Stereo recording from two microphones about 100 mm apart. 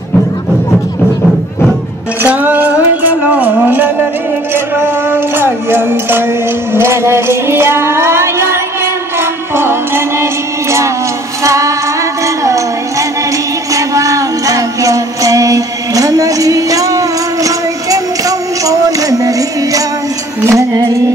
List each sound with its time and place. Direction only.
2.3 s music: 15° right (ahead or behind)
11.4 s music: 30° right (ahead or behind)
13.7 s music: 35° right (ahead or behind)